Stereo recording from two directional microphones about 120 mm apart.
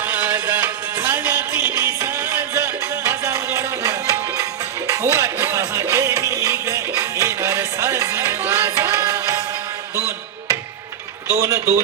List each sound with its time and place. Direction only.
0.0 s music: 15° right (ahead or behind)
11.3 s a man's voice: 25° right (ahead or behind)